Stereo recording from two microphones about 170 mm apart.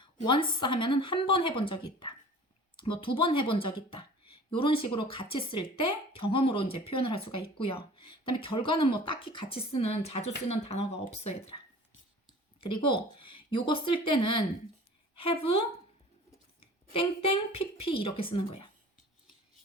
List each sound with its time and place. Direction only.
0.3 s speech: 30° left (ahead or behind)
12.5 s a woman's voice: 30° left (ahead or behind)